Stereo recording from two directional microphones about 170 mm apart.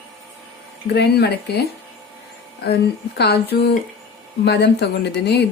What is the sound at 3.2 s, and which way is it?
Speech, 75° left (ahead or behind).